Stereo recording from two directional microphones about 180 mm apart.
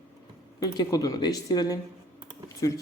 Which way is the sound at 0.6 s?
20° left (ahead or behind).